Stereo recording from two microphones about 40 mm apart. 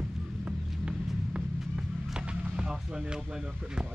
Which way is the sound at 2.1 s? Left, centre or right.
Right.